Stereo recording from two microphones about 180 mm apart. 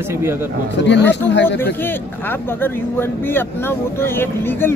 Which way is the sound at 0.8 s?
80° left.